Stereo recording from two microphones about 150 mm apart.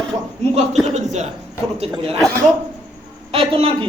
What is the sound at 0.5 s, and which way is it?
Speech, 50° right (ahead or behind).